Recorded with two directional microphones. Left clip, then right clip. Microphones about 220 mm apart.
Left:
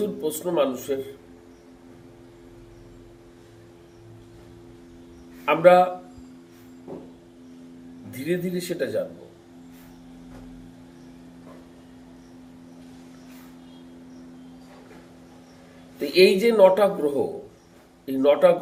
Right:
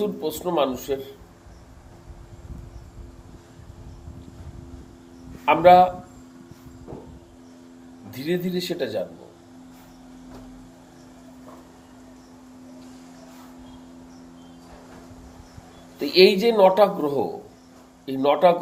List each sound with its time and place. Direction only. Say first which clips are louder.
0.2 s speech: left 1 dB; 5° right (ahead or behind)
5.5 s speech: right 2 dB; 5° right (ahead or behind)
8.1 s speech: right 1 dB; 5° right (ahead or behind)
16.0 s speech: right 1 dB; 5° right (ahead or behind)